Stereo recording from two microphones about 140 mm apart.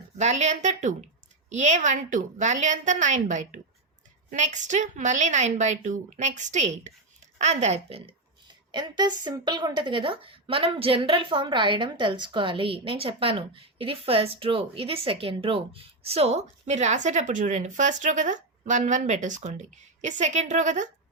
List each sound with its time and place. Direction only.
0.2 s a woman's voice: 55° right (ahead or behind)
8.7 s a woman's voice: 30° right (ahead or behind); by 20.8 s 60° right (ahead or behind)